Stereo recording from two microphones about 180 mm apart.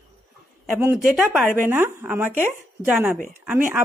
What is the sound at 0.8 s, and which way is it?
Speech, 10° right (ahead or behind).